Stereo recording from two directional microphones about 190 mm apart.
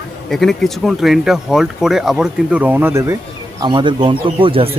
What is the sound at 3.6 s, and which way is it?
Speech, 25° right (ahead or behind).